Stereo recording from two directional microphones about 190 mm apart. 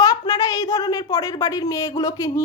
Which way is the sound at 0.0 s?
20° left (ahead or behind).